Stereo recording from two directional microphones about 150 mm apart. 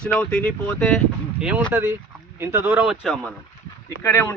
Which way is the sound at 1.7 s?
15° right (ahead or behind).